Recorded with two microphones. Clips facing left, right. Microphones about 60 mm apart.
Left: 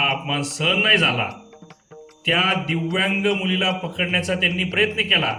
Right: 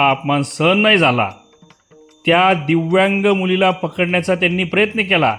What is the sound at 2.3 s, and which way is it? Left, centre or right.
Speech, right.